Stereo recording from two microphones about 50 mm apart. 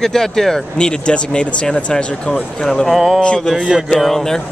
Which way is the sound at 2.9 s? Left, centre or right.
Centre.